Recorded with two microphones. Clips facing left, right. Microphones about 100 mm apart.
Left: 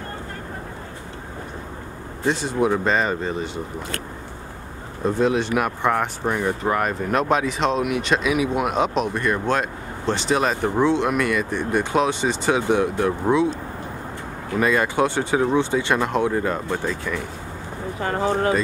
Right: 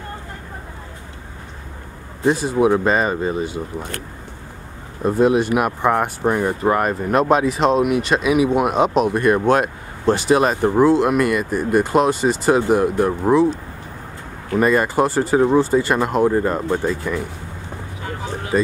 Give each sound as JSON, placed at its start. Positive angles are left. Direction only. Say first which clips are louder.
{"t": 2.2, "sound": "speech", "louder": "right 5 dB", "side_deg": -5}
{"t": 5.0, "sound": "speech", "louder": "right 4 dB", "side_deg": -5}
{"t": 14.6, "sound": "speech", "louder": "right 3 dB", "side_deg": -5}
{"t": 18.0, "sound": "a sound", "louder": "left 8 dB", "side_deg": 60}